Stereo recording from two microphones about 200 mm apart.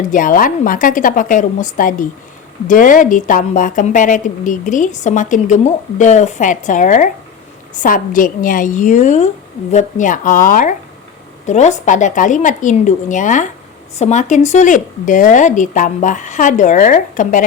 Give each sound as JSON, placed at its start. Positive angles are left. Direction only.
{"t": 0.0, "sound": "a woman's voice", "side_deg": 40}